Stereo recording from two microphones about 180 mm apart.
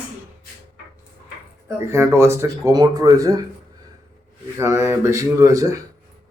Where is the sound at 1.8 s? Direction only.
15° right (ahead or behind).